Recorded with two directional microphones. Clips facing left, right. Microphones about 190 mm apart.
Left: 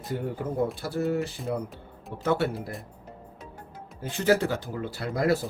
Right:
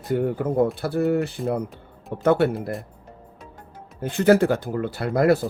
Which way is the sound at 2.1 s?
55° right (ahead or behind).